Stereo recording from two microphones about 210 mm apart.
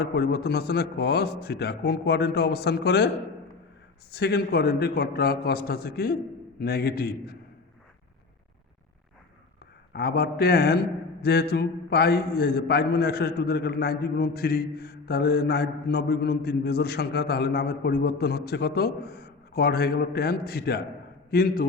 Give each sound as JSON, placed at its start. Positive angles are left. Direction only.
{"t": 0.0, "sound": "a man's voice", "side_deg": 50}
{"t": 4.1, "sound": "a man's voice", "side_deg": 50}
{"t": 9.9, "sound": "a man's voice", "side_deg": 45}